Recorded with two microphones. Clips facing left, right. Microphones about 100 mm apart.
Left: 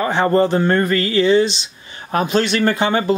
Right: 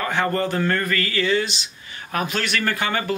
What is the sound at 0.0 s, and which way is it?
Speech, 25° left (ahead or behind).